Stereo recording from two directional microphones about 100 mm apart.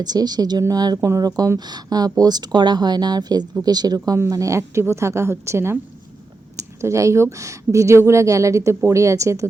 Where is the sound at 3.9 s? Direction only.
30° right (ahead or behind).